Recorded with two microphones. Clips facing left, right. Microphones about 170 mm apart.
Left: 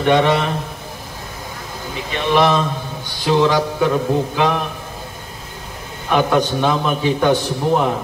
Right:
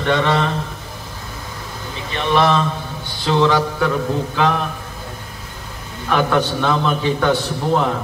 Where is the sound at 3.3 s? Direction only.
15° left (ahead or behind).